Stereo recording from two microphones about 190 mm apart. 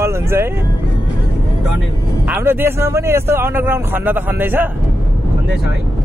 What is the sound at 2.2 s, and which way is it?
Speech, 10° right (ahead or behind).